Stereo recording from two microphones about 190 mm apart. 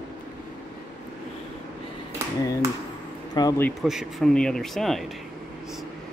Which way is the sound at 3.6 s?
Centre (ahead or behind).